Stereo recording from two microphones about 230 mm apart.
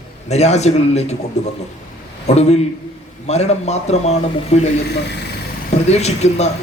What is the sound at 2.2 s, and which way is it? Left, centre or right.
A man's voice, left.